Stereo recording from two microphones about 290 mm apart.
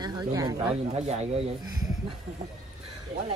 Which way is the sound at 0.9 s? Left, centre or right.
Right.